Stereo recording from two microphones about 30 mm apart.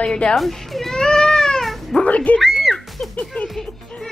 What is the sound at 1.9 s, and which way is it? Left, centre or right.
Speech, left.